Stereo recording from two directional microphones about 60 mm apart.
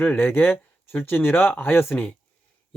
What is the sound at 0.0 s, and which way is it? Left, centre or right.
Speech, left.